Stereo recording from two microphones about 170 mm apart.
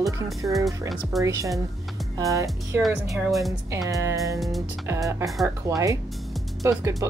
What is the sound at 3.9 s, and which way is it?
Speech, 20° right (ahead or behind).